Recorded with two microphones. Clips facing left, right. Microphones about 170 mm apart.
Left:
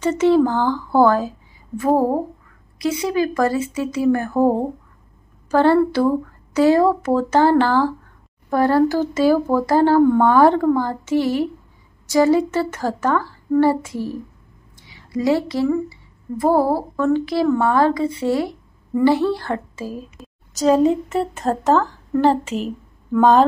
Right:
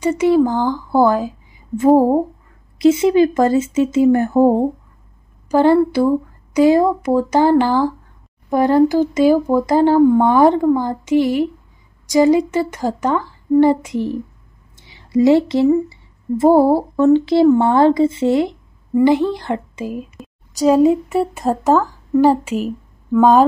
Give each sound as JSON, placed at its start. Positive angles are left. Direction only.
{"t": 0.0, "sound": "a woman's voice", "side_deg": -10}
{"t": 1.8, "sound": "speech", "side_deg": -20}
{"t": 5.5, "sound": "a woman's voice", "side_deg": -15}
{"t": 14.8, "sound": "a sound", "side_deg": -25}
{"t": 16.5, "sound": "a woman's voice", "side_deg": -25}
{"t": 20.2, "sound": "a sound", "side_deg": 0}
{"t": 20.6, "sound": "a woman's voice", "side_deg": -10}